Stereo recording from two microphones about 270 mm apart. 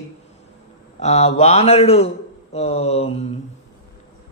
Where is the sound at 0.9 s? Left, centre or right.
Left.